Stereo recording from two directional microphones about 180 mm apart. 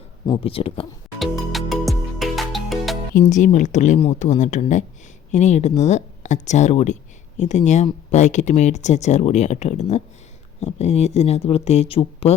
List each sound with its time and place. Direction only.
0.3 s speech: 30° left (ahead or behind)
1.2 s music: centre (ahead or behind)
3.2 s speech: 45° left (ahead or behind)